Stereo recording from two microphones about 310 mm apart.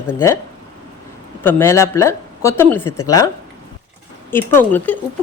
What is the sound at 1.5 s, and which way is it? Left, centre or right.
Speech, centre.